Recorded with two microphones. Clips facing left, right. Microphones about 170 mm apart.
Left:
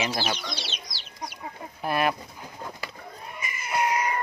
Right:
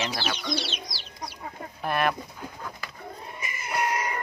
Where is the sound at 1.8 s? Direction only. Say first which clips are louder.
Left 1 dB; 10° left (ahead or behind).